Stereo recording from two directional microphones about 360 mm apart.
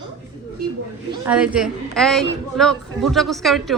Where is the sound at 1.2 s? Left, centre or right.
Centre.